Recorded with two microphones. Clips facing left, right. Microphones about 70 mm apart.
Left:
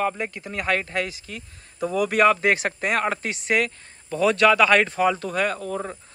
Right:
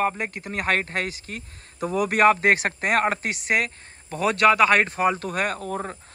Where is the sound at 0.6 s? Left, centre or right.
Right.